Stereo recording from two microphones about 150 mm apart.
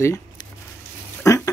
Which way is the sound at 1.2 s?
20° left (ahead or behind).